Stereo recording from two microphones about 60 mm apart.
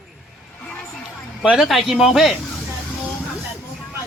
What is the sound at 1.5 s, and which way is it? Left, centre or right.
Speech, centre.